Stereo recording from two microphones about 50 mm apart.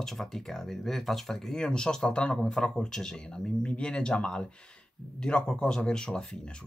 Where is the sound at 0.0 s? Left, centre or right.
Centre.